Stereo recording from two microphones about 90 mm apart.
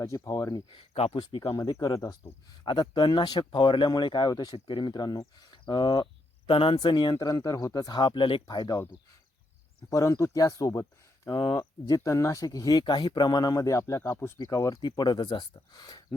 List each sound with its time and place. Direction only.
0.0 s speech: 40° left (ahead or behind)
0.7 s speech: 70° left (ahead or behind)
1.5 s speech: 40° left (ahead or behind)
2.6 s speech: 55° left (ahead or behind)
4.5 s speech: 60° left (ahead or behind)
6.5 s speech: 80° left
8.4 s speech: 45° left (ahead or behind)
10.2 s speech: 35° left (ahead or behind)
12.8 s speech: 55° left (ahead or behind); by 14.8 s 35° left (ahead or behind)
14.8 s speech: 55° left (ahead or behind)